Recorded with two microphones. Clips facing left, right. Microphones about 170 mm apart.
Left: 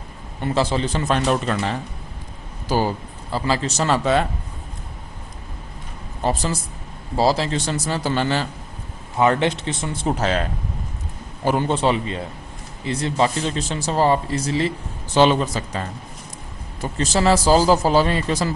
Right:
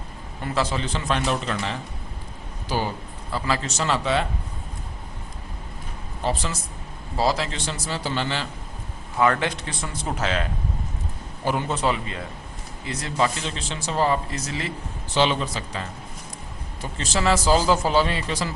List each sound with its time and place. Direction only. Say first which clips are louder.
0.4 s speech: left 5 dB; 30° left (ahead or behind)
0.9 s a man's voice: left 4 dB; 45° left (ahead or behind)
3.3 s speech: left 4 dB; 30° left (ahead or behind)
3.8 s a man's voice: left 4 dB; 45° left (ahead or behind)
6.2 s speech: left 4 dB; 40° left (ahead or behind)
7.7 s a man's voice: left 5 dB; 45° left (ahead or behind)
9.1 s speech: left 4 dB; 25° left (ahead or behind)
11.7 s speech: left 5 dB; 30° left (ahead or behind)
13.4 s speech: left 7 dB; 40° left (ahead or behind)
15.1 s a man's voice: left 6 dB; 45° left (ahead or behind)